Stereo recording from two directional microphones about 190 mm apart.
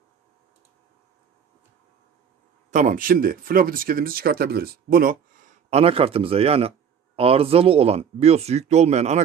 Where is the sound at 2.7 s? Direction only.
45° right (ahead or behind).